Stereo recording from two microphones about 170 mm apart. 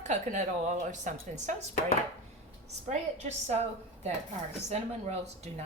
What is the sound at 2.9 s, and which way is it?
Speech, 40° right (ahead or behind).